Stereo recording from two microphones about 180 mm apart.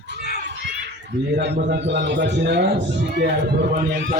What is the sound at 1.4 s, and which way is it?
A man's voice, 70° right (ahead or behind).